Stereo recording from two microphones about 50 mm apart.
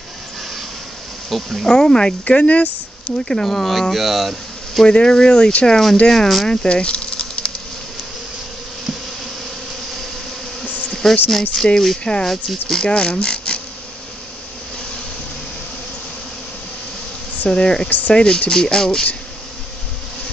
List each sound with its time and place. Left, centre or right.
1.3 s speech: centre
1.7 s speech: centre
3.3 s speech: centre
4.8 s speech: centre
5.7 s speech: centre
6.5 s insect: centre
10.6 s bee: left
10.9 s insect: centre
11.8 s speech: centre
12.3 s speech: centre
12.8 s speech: centre
17.5 s speech: centre
17.8 s speech: left
18.1 s speech: centre